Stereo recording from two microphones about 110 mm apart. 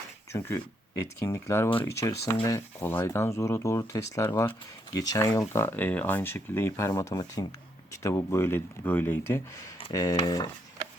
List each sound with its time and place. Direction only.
0.3 s speech: 25° left (ahead or behind)
5.6 s speech: 15° left (ahead or behind); by 10.5 s 35° left (ahead or behind)